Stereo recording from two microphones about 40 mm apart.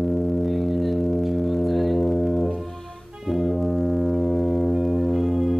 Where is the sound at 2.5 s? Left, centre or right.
Centre.